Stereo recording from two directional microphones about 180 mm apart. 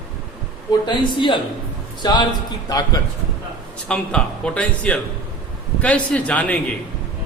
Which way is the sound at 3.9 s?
5° left (ahead or behind).